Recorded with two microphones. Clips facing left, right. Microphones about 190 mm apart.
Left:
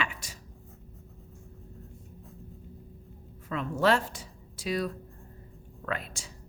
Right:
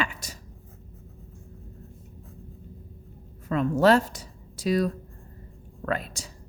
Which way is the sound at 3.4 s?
40° right (ahead or behind).